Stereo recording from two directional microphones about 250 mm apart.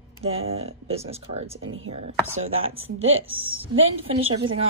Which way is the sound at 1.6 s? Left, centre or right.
Right.